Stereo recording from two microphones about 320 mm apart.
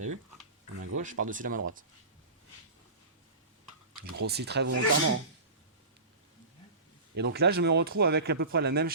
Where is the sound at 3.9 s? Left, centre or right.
Right.